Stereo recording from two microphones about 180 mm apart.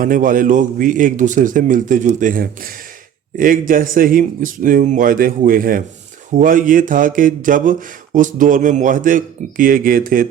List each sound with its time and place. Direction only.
0.0 s speech: 50° right (ahead or behind)